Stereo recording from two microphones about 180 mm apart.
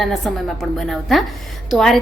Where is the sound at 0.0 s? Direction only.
Centre (ahead or behind).